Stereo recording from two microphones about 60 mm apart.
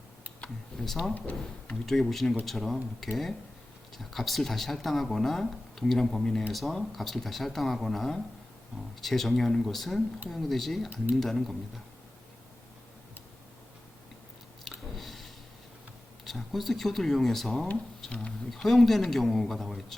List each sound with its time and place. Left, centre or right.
0.8 s speech: centre
1.1 s speech: left
1.9 s speech: centre
14.6 s chewing: centre
16.2 s speech: centre
18.1 s speech: left
18.5 s speech: centre